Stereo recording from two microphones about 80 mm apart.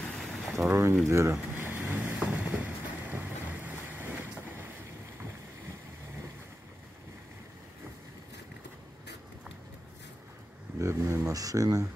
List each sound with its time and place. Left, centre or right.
0.0 s vehicle: centre
0.7 s speech: right
1.0 s a sound: right
1.8 s vehicle: right
10.8 s a sound: right
11.3 s speech: right